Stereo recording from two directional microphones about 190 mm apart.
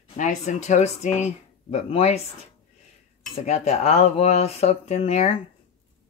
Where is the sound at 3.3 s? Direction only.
35° left (ahead or behind).